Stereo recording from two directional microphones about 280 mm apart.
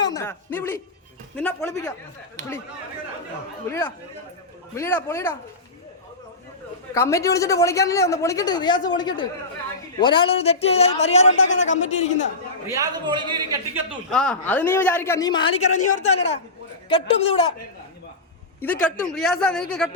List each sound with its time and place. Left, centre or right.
0.0 s a man's voice: centre
3.7 s a man's voice: centre
6.9 s a man's voice: centre
11.3 s a man's voice: left
12.6 s a man's voice: centre
14.1 s a man's voice: centre
18.6 s speech: centre